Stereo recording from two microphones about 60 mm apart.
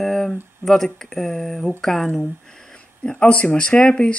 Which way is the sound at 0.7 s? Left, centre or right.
Centre.